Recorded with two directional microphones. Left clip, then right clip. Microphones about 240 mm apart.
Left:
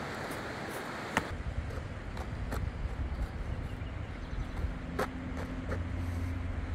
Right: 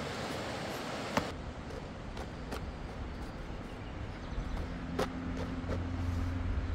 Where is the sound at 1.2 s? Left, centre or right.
Left.